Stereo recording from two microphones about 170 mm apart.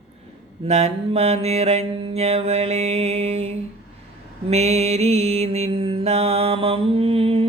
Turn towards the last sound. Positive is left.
turn(degrees=-35)  # may be behind; listen again after turning